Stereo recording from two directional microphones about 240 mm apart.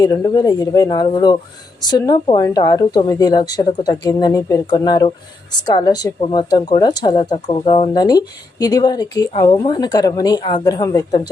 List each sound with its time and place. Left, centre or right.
0.0 s a woman's voice: centre